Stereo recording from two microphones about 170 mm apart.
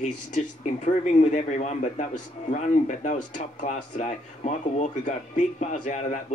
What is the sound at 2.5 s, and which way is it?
Speech, 45° left (ahead or behind).